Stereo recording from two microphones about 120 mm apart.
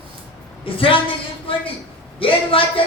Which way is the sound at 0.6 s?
45° left (ahead or behind).